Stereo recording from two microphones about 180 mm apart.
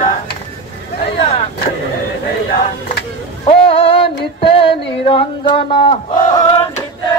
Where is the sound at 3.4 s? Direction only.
30° left (ahead or behind).